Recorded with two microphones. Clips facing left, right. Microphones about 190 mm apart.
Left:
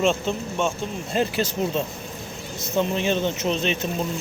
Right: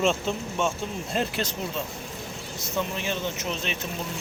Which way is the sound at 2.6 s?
25° left (ahead or behind).